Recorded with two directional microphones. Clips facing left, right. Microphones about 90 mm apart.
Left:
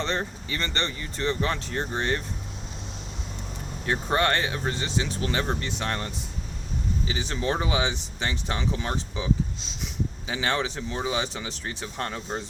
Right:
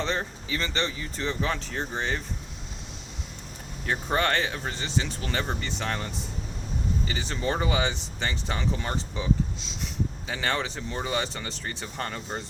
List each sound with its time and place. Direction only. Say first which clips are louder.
0.0 s speech: left 1 dB; centre (ahead or behind)
3.8 s speech: left 2 dB; centre (ahead or behind)